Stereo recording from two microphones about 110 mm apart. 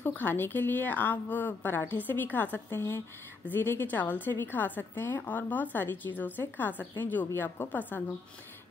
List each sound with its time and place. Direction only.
0.0 s a woman's voice: 15° left (ahead or behind)